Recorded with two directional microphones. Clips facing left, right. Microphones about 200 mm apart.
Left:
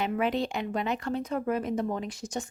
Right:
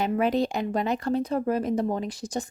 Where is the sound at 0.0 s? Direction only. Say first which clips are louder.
Right 4 dB; 40° right (ahead or behind).